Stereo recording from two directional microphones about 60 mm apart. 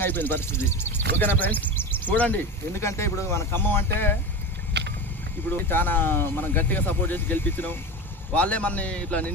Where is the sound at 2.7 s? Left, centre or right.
Left.